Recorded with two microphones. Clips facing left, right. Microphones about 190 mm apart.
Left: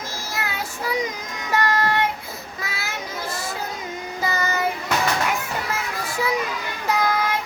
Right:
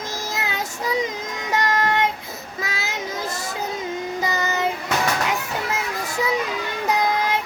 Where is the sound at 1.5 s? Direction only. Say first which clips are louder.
Even; 20° right (ahead or behind).